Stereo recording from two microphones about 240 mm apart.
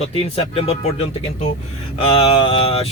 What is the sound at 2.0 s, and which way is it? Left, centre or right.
Speech, left.